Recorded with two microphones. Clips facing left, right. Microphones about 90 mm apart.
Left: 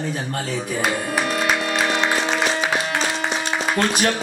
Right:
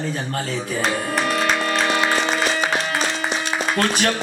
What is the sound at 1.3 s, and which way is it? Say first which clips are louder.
Music: right 2 dB; 10° left (ahead or behind).